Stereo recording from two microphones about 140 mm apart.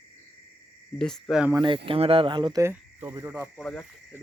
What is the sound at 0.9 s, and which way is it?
Speech, 5° left (ahead or behind).